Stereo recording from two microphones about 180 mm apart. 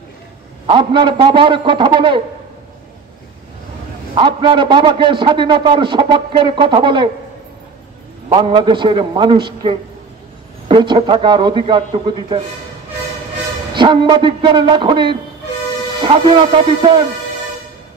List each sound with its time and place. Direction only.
0.7 s a man's voice: 25° right (ahead or behind)
4.1 s a man's voice: 25° right (ahead or behind)
8.3 s a man's voice: 25° right (ahead or behind)
13.7 s a man's voice: 25° right (ahead or behind)